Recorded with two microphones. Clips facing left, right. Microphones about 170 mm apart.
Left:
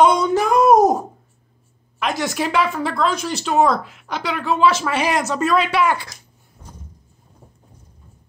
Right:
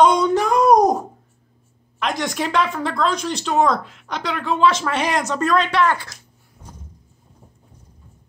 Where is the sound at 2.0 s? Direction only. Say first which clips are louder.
Left 1 dB; 5° left (ahead or behind).